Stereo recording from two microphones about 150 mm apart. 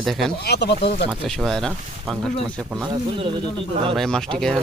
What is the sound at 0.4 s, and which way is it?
Speech, 90° left.